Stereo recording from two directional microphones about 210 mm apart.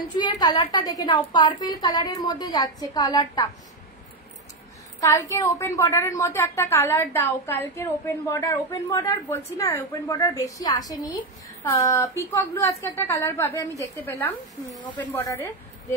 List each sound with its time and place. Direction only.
0.2 s a woman's voice: 20° left (ahead or behind)
5.0 s a woman's voice: 15° left (ahead or behind)